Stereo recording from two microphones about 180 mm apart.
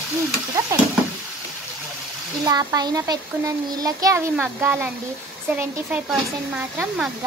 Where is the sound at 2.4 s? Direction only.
20° right (ahead or behind).